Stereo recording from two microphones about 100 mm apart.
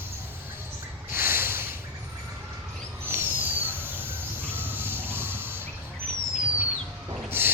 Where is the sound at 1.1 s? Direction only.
20° right (ahead or behind).